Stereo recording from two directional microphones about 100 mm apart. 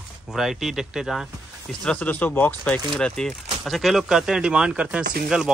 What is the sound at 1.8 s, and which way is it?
Speech, 10° left (ahead or behind).